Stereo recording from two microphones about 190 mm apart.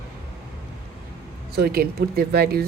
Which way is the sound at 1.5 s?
55° right (ahead or behind).